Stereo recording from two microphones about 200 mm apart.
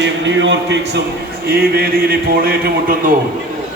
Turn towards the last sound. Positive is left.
turn(degrees=-50)  # may be behind; listen again after turning